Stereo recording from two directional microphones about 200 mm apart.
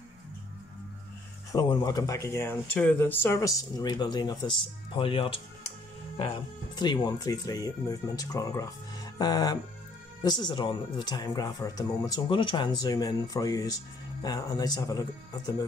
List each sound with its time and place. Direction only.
1.5 s speech: 20° left (ahead or behind)